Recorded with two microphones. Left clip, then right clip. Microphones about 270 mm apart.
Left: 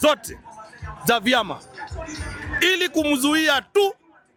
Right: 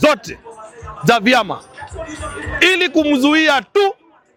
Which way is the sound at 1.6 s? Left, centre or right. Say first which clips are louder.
Right 5 dB; left.